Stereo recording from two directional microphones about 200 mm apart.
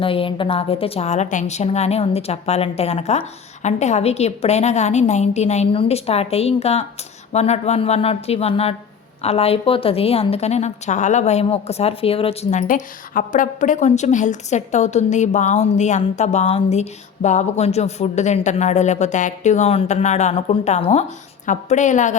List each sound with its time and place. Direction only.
0.0 s a woman's voice: 25° left (ahead or behind)